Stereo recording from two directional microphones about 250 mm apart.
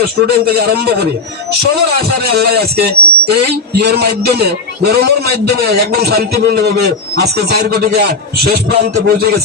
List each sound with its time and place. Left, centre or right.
0.0 s a man's voice: right
2.3 s a man's voice: right